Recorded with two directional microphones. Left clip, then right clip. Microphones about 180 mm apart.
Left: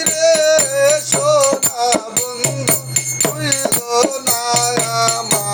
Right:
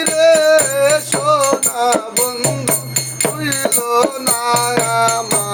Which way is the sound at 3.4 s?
15° right (ahead or behind).